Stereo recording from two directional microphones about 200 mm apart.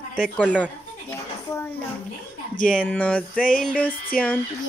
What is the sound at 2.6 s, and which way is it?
A child's voice, 5° left (ahead or behind).